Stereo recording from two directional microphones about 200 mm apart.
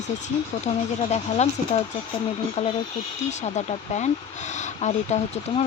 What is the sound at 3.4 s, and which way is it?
Speech, 35° left (ahead or behind).